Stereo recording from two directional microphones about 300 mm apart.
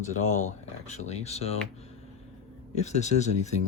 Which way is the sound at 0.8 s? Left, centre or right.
Left.